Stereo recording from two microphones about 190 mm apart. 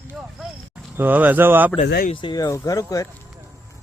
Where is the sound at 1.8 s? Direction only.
55° left (ahead or behind).